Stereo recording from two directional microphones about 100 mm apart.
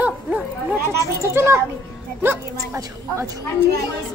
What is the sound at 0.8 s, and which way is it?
Speech, 25° right (ahead or behind).